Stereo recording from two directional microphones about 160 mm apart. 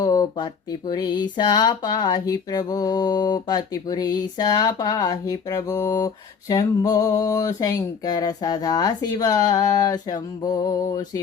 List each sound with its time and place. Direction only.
0.0 s speech: 25° left (ahead or behind)